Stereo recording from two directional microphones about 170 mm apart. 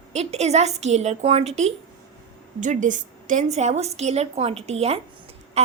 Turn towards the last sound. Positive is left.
turn(degrees=-40)  # may be behind; listen again after turning